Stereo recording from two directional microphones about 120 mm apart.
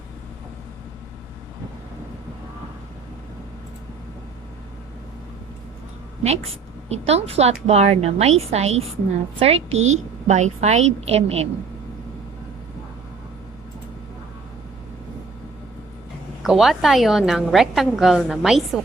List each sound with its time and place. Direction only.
6.2 s a woman's voice: 60° right (ahead or behind)
16.4 s a woman's voice: 5° right (ahead or behind)